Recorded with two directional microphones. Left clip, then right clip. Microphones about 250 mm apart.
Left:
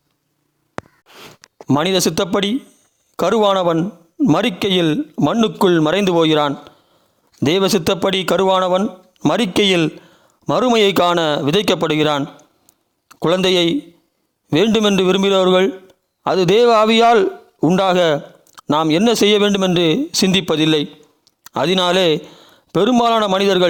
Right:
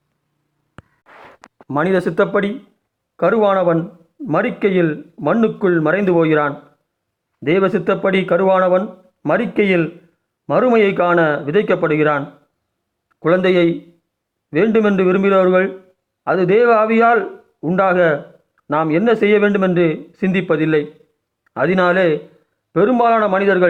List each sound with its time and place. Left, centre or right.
1.7 s a man's voice: left